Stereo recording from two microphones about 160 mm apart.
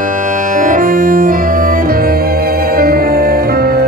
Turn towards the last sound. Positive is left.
turn(degrees=-70)  # may be behind; listen again after turning